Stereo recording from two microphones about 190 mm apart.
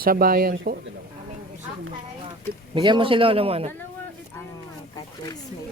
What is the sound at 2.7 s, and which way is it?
Speech, 25° right (ahead or behind).